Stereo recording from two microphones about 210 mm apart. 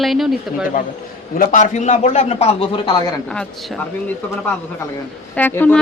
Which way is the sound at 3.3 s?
5° left (ahead or behind).